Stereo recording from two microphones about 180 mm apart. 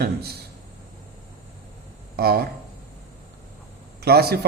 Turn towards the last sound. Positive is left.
turn(degrees=-60)  # may be behind; listen again after turning